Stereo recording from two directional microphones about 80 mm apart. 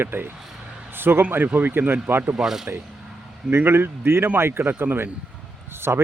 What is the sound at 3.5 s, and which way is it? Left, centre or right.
A man's voice, right.